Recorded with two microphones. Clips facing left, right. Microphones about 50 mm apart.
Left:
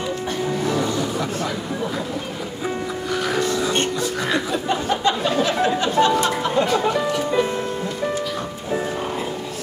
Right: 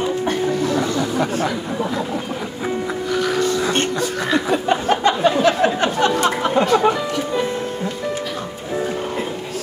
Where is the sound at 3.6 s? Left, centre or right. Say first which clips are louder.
Right 2 dB; right.